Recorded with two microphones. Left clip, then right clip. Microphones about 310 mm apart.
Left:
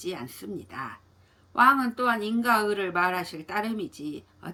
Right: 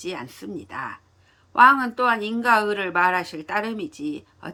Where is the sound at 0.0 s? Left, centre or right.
Centre.